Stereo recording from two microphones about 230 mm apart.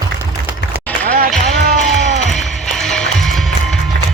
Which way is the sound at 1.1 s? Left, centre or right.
Right.